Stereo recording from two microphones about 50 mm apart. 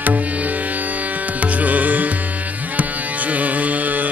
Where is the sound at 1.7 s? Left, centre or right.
Right.